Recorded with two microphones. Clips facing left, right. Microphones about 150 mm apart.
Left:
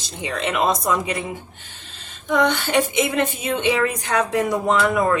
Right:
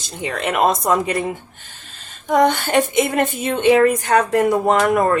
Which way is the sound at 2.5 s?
50° right (ahead or behind).